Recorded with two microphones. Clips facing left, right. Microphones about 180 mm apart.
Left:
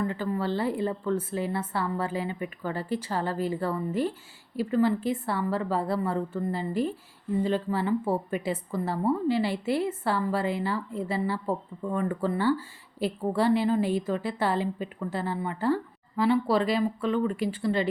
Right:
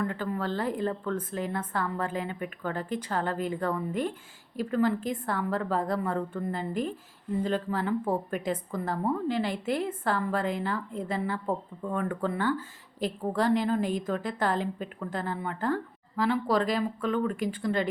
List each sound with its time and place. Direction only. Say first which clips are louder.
0.0 s a woman's voice: left 2 dB; 5° left (ahead or behind)